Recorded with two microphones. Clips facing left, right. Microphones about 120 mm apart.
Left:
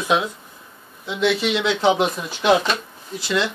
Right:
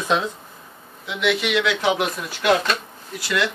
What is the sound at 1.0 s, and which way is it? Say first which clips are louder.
Speech: left 2 dB; 30° left (ahead or behind).